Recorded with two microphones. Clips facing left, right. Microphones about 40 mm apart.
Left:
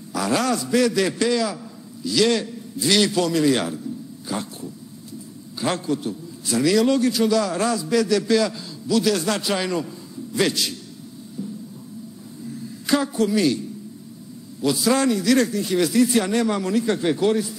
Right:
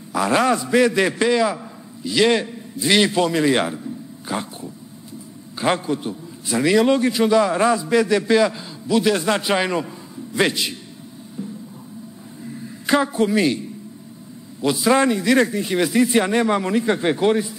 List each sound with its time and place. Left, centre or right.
0.1 s a man's voice: right
12.6 s a man's voice: right